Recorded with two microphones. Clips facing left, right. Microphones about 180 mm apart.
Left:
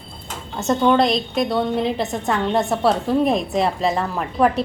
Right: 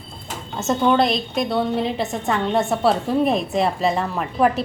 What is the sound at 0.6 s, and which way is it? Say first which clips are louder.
A woman's voice: left 1 dB; centre (ahead or behind).